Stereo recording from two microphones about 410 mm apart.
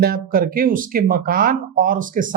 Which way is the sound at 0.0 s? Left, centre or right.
Right.